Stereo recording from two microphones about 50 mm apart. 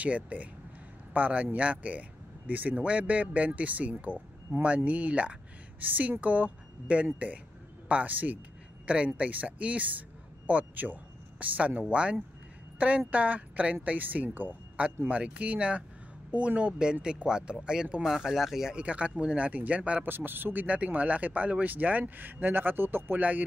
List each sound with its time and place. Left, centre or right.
0.0 s speech: right
18.0 s speech: centre
18.8 s speech: right
20.1 s speech: right
20.6 s speech: right